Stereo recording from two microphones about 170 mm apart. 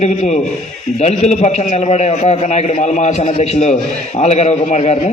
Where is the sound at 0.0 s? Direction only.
45° left (ahead or behind).